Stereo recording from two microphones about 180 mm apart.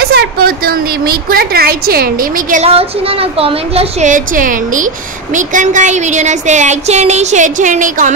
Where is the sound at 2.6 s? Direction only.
35° right (ahead or behind).